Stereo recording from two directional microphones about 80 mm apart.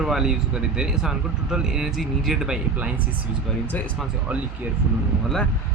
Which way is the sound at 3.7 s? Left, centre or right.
Left.